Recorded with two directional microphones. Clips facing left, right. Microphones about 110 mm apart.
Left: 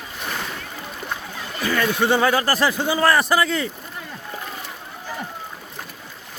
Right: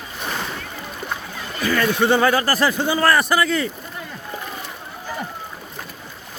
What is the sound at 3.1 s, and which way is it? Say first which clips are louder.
Speech: even; 25° left (ahead or behind).